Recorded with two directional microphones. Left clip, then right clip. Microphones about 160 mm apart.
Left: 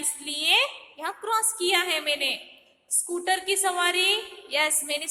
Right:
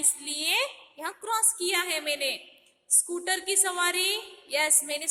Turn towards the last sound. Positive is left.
turn(degrees=-15)  # may be behind; listen again after turning